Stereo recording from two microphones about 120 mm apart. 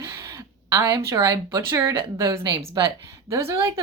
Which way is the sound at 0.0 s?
25° right (ahead or behind).